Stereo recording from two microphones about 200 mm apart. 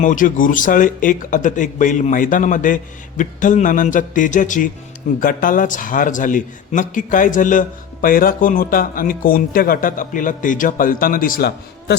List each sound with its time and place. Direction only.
0.0 s a man's voice: 40° left (ahead or behind)